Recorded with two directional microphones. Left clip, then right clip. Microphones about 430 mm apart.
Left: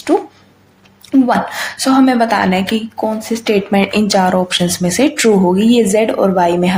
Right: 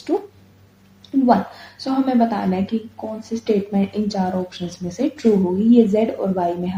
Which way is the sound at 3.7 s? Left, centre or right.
Right.